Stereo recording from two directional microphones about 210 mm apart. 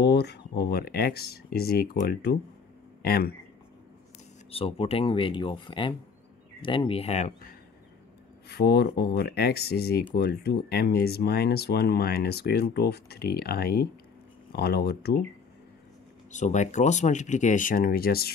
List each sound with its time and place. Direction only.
0.0 s speech: 50° left (ahead or behind)
4.5 s speech: 25° left (ahead or behind)
8.5 s speech: 50° left (ahead or behind)
16.3 s speech: 35° left (ahead or behind)